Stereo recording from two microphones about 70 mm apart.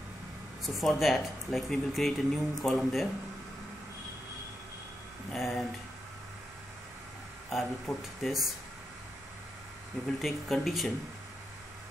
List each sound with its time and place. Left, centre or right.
0.7 s speech: centre
5.3 s a sound: centre
7.4 s speech: centre
10.2 s speech: centre